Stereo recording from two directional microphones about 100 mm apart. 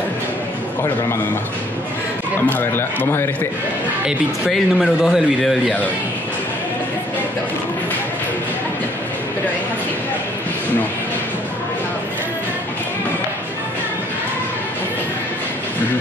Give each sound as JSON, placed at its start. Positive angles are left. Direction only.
{"t": 2.5, "sound": "speech", "side_deg": 20}
{"t": 4.0, "sound": "speech", "side_deg": 0}